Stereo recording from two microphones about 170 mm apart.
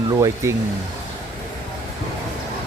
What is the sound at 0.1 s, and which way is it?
Speech, 20° right (ahead or behind).